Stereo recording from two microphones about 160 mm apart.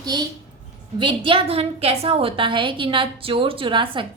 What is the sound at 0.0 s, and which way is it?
A woman's voice, 25° right (ahead or behind).